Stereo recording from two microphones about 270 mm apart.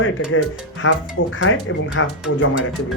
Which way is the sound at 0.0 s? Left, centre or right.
Left.